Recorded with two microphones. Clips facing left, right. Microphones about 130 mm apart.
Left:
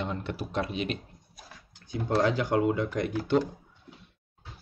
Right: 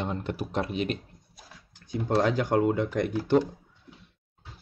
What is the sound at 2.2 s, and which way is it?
Speech, 45° right (ahead or behind).